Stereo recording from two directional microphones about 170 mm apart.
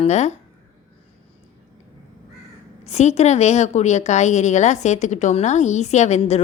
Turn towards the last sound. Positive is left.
turn(degrees=40)  # may be behind; listen again after turning